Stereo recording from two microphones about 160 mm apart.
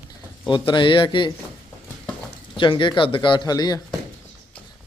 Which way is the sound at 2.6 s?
30° left (ahead or behind).